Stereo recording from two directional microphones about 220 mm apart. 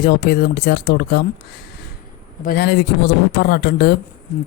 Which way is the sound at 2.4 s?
45° left (ahead or behind).